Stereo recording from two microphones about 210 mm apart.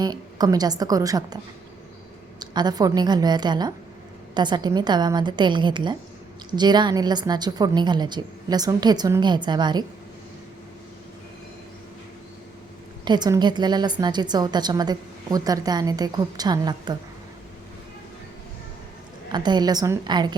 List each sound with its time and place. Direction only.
0.0 s a woman's voice: 20° right (ahead or behind)
2.4 s a woman's voice: 20° right (ahead or behind)
13.1 s a woman's voice: 20° right (ahead or behind)
19.3 s a woman's voice: 20° right (ahead or behind)